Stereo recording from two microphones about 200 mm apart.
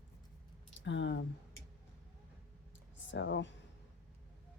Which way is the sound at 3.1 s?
65° left (ahead or behind).